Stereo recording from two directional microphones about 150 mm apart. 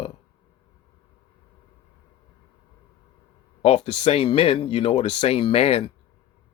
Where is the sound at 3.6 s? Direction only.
40° left (ahead or behind).